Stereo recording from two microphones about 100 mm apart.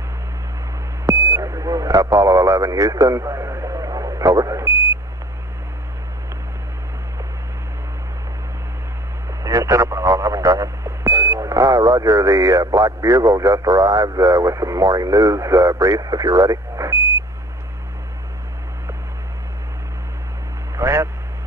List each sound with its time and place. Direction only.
1.0 s sidetone: 30° right (ahead or behind)
9.4 s speech: 35° right (ahead or behind)
20.7 s vehicle: 30° right (ahead or behind)